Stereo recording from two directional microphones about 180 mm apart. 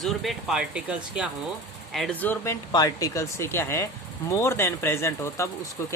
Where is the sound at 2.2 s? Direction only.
15° left (ahead or behind).